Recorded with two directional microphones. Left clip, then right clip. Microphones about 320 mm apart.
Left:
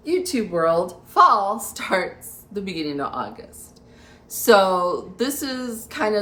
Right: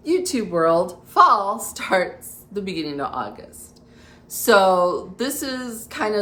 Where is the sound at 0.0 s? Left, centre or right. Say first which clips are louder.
Right 1 dB; centre.